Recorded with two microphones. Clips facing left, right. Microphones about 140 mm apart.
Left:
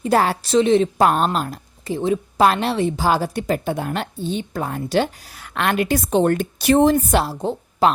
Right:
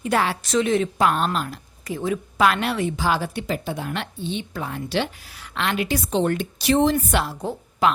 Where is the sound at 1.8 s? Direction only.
30° left (ahead or behind).